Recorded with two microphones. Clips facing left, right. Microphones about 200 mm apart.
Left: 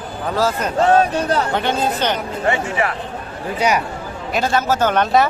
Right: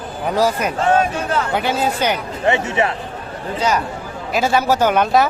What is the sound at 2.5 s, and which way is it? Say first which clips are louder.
Speech: right 3 dB; 25° right (ahead or behind).